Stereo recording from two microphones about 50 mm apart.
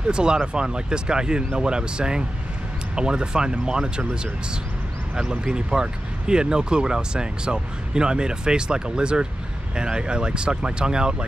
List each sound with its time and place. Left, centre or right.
0.1 s speech: centre